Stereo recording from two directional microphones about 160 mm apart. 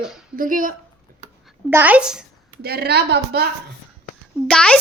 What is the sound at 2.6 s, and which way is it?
Speech, 75° right (ahead or behind).